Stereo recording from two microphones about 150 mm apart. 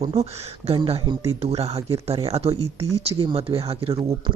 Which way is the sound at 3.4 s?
40° right (ahead or behind).